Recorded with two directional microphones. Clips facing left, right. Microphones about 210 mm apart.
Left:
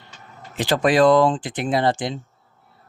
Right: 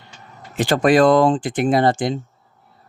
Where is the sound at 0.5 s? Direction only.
50° right (ahead or behind).